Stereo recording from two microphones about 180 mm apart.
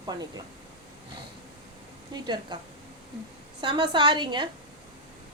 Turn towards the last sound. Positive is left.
turn(degrees=-25)  # may be behind; listen again after turning